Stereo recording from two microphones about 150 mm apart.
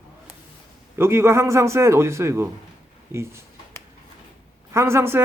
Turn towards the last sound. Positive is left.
turn(degrees=-15)  # may be behind; listen again after turning